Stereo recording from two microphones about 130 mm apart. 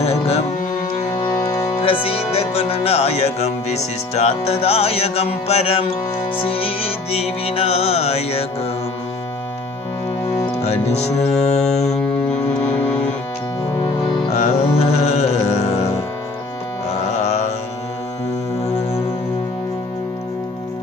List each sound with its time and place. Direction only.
0.0 s music: 55° left (ahead or behind)
1.1 s music: 30° left (ahead or behind)
1.8 s music: 45° left (ahead or behind)
10.6 s speech: 55° left (ahead or behind)
14.3 s music: 55° left (ahead or behind)
17.1 s mantra: 60° left (ahead or behind)